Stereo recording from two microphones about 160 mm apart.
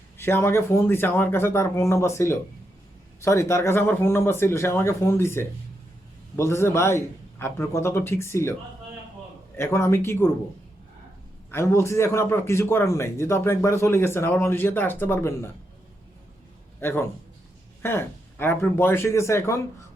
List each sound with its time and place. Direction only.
0.2 s a man's voice: 15° left (ahead or behind)
9.6 s a man's voice: 15° left (ahead or behind)
11.5 s a man's voice: 15° left (ahead or behind)
16.8 s a man's voice: 15° left (ahead or behind)